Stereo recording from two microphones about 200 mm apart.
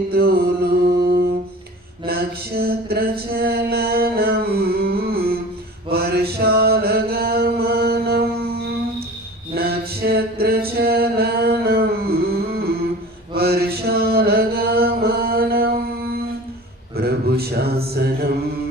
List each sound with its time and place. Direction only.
0.1 s music: 50° right (ahead or behind)
2.0 s a sound: 50° right (ahead or behind)
5.9 s chant: 50° right (ahead or behind)
9.6 s a capella: 50° right (ahead or behind)
13.3 s chant: 50° right (ahead or behind)
17.0 s mantra: 50° right (ahead or behind)